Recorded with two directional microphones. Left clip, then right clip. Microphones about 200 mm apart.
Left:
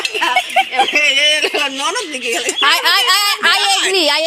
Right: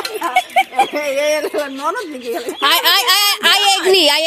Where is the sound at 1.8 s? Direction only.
25° right (ahead or behind).